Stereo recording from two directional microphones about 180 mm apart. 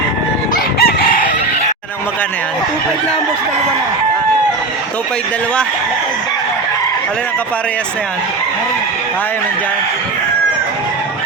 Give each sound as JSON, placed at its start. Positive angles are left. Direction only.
{"t": 0.8, "sound": "chicken", "side_deg": 55}